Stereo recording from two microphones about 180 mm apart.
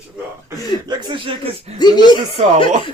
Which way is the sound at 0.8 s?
25° right (ahead or behind).